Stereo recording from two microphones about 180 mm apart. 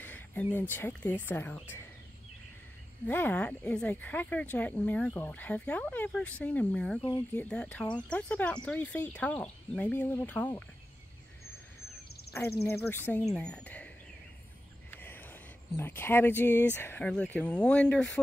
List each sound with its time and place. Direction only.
0.0 s speech: 10° left (ahead or behind)
3.1 s speech: 10° left (ahead or behind)
12.6 s speech: 10° left (ahead or behind)